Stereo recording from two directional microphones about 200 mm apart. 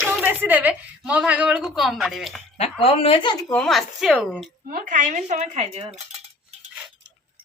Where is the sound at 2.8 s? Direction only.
30° left (ahead or behind).